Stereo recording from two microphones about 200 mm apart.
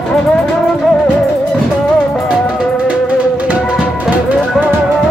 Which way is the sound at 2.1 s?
5° right (ahead or behind).